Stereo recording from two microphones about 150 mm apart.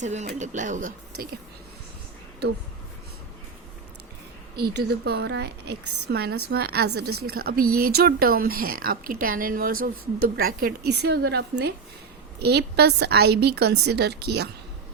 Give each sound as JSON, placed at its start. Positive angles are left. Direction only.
{"t": 0.0, "sound": "speech", "side_deg": -50}
{"t": 2.4, "sound": "a woman's voice", "side_deg": -90}
{"t": 4.5, "sound": "a woman's voice", "side_deg": -90}